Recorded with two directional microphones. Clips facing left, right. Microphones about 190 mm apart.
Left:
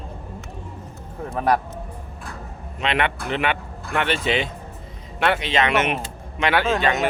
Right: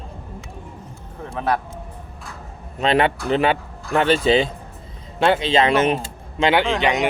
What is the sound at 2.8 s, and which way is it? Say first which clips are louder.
Speech: right 5 dB; 35° right (ahead or behind).